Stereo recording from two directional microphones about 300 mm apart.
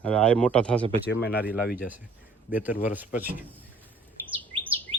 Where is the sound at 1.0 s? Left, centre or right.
Left.